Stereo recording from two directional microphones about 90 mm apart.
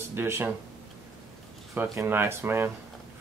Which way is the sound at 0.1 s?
25° right (ahead or behind).